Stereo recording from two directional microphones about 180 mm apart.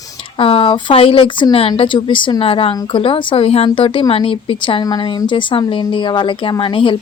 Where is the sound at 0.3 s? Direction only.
30° left (ahead or behind).